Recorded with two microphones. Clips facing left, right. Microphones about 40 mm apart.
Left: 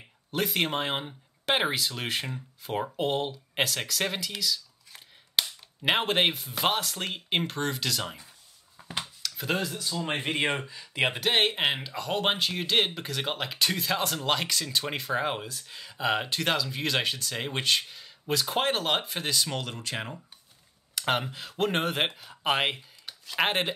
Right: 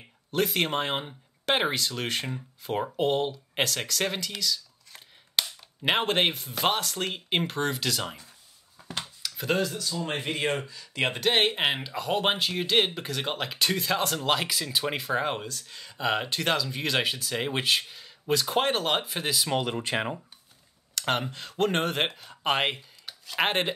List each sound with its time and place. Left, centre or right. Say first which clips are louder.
0.3 s speech: right 2 dB; centre
8.7 s scissors: left 1 dB; centre
9.2 s speech: right 3 dB; centre
10.0 s speech: left 1 dB; left; by 19.5 s centre
19.5 s speech: right 6 dB; right
20.9 s speech: even; centre